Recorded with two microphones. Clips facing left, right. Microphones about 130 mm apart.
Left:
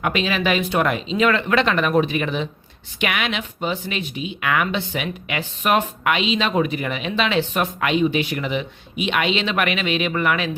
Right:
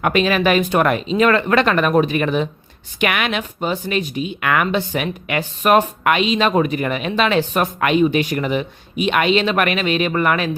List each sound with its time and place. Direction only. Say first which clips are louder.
0.0 s speech: right 5 dB; 50° right (ahead or behind)